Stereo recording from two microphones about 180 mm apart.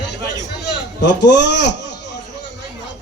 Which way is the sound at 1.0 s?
75° left (ahead or behind).